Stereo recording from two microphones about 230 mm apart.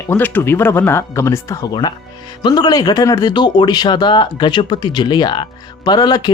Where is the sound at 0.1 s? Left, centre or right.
Centre.